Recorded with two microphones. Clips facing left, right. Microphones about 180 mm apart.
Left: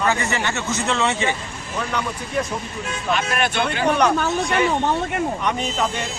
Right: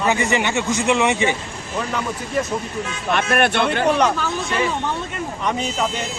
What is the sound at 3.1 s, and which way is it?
Speech, 60° right (ahead or behind).